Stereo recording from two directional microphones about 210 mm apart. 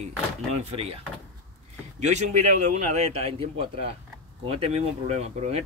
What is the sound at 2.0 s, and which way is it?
A man's voice, 30° right (ahead or behind).